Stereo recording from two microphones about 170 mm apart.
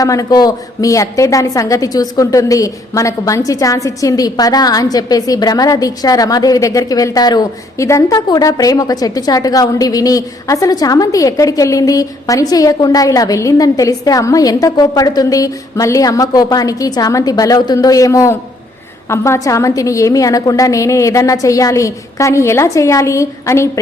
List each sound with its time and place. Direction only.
0.0 s a woman's voice: 20° left (ahead or behind)